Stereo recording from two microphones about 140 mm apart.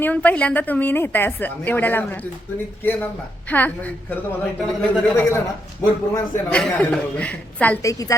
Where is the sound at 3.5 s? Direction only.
10° left (ahead or behind).